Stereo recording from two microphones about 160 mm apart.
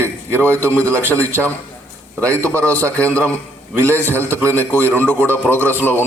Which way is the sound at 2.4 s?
20° right (ahead or behind).